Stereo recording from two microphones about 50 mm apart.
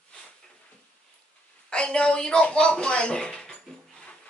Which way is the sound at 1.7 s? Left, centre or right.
Centre.